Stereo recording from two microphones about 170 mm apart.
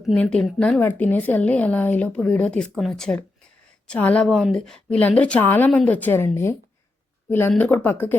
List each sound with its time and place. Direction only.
0.0 s speech: 5° left (ahead or behind)